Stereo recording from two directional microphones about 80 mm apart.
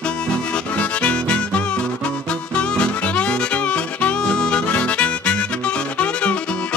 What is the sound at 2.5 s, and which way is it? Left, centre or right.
Music, centre.